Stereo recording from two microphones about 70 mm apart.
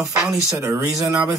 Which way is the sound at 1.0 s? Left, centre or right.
Right.